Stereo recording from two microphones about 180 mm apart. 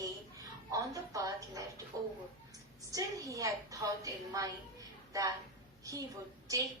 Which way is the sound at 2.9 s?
20° right (ahead or behind).